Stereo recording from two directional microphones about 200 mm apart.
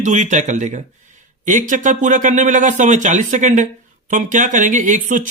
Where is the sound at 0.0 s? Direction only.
35° right (ahead or behind).